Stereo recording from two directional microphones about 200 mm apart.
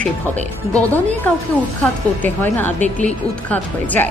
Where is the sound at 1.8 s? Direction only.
10° left (ahead or behind).